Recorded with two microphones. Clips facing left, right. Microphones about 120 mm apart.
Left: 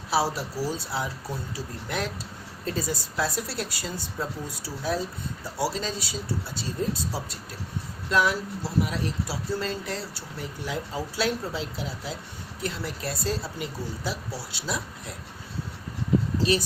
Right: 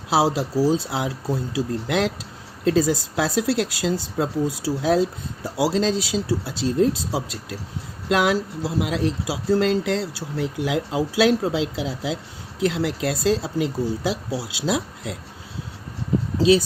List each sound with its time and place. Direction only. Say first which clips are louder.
0.1 s speech: right 6 dB; 90° right